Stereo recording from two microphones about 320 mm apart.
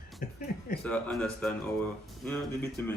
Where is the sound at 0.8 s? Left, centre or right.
Centre.